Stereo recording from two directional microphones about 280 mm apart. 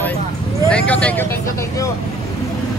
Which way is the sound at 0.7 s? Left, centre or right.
Centre.